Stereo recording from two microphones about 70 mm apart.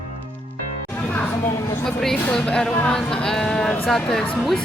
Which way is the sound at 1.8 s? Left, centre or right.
Centre.